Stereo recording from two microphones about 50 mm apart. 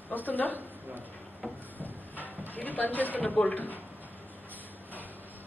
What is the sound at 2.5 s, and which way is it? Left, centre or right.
Speech, left.